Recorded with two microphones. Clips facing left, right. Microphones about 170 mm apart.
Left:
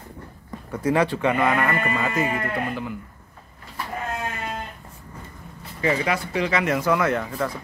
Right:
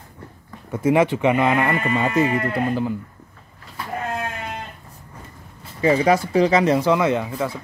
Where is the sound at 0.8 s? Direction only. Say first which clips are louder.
Right 4 dB; 20° right (ahead or behind).